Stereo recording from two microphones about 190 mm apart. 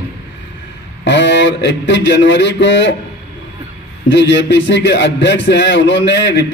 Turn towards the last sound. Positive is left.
turn(degrees=65)  # may be behind; listen again after turning